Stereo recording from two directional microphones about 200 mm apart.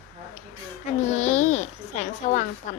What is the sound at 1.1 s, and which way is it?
A child's voice, 35° left (ahead or behind).